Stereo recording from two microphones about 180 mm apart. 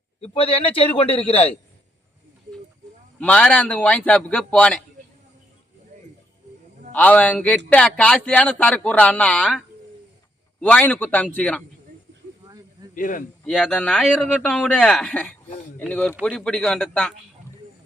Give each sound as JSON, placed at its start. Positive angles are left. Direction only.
{"t": 0.2, "sound": "a man's voice", "side_deg": 30}
{"t": 3.2, "sound": "speech", "side_deg": 5}
{"t": 6.9, "sound": "speech", "side_deg": 10}
{"t": 12.9, "sound": "speech", "side_deg": 50}
{"t": 13.4, "sound": "a man's voice", "side_deg": 5}